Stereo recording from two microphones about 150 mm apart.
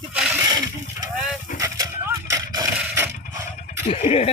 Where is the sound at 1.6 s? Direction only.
20° right (ahead or behind).